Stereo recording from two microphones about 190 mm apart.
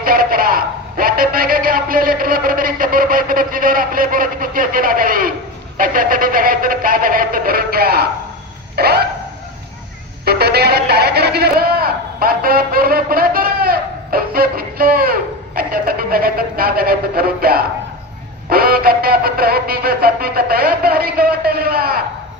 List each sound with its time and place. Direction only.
0.0 s a man's voice: 50° right (ahead or behind)
8.7 s a sound: 55° right (ahead or behind)
10.2 s a man's voice: 55° right (ahead or behind)